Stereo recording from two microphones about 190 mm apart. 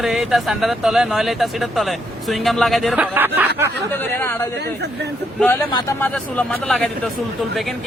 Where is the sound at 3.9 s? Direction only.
10° left (ahead or behind).